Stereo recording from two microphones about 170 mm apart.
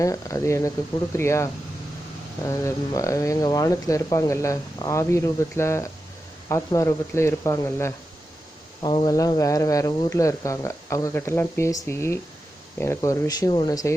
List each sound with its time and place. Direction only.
0.0 s speech: 20° left (ahead or behind)
8.8 s speech: 25° left (ahead or behind)